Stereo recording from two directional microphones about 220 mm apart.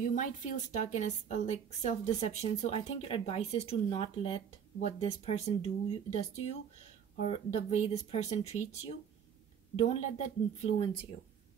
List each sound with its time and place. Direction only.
0.0 s a woman's voice: 35° left (ahead or behind)